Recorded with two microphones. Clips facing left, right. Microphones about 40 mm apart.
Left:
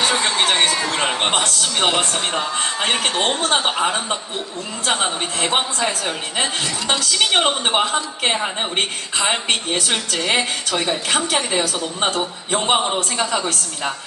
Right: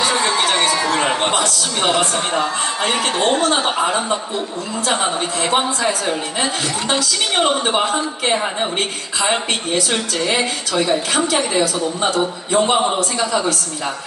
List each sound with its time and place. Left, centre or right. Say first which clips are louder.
0.0 s a sound: right 1 dB; left
2.6 s a man's voice: right 1 dB; left
6.1 s a man's voice: right 2 dB; left
9.5 s a woman's voice: right 1 dB; left